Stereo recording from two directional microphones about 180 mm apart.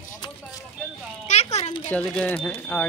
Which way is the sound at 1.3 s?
35° left (ahead or behind).